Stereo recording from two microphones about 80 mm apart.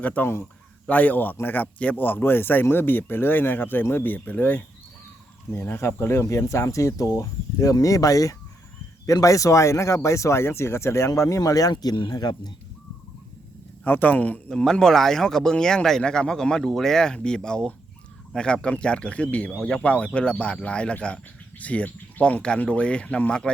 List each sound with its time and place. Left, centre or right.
0.0 s speech: centre; by 11.7 s left
11.7 s speech: left
12.1 s speech: left
13.8 s speech: left
14.5 s speech: centre